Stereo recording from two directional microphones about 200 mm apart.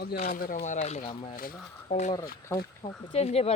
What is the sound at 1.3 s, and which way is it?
Speech, 40° left (ahead or behind).